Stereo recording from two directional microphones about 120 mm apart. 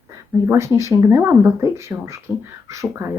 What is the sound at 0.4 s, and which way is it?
Speech, 20° right (ahead or behind).